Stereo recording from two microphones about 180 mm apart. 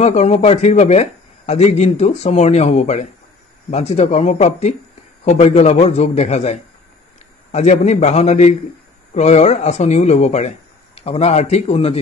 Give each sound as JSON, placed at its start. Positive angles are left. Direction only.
{"t": 0.0, "sound": "speech", "side_deg": 35}